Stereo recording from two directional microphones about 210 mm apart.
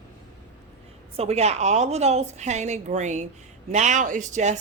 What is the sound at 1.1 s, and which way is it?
A woman's voice, 30° right (ahead or behind).